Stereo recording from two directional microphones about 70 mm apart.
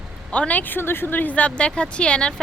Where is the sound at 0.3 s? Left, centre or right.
Centre.